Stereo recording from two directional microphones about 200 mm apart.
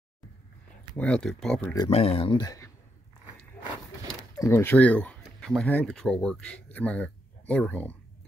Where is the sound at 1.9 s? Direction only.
30° left (ahead or behind).